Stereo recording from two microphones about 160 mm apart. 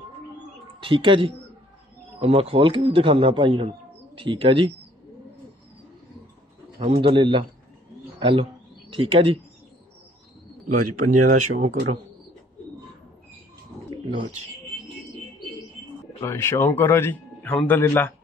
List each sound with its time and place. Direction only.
0.8 s speech: 30° right (ahead or behind)
6.8 s speech: 35° right (ahead or behind)
10.7 s speech: 55° right (ahead or behind)
16.2 s speech: 15° left (ahead or behind)